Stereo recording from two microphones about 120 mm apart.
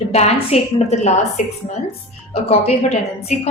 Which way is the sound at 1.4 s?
80° left.